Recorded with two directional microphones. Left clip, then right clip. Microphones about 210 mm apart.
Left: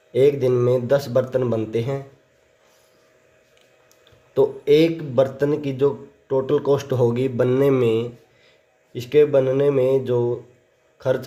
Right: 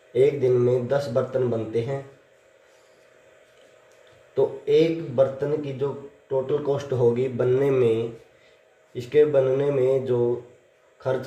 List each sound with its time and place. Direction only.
0.1 s speech: 55° left (ahead or behind)
4.4 s speech: 55° left (ahead or behind)